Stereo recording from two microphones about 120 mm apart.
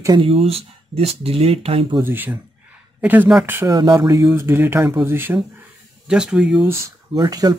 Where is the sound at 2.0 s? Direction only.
15° right (ahead or behind).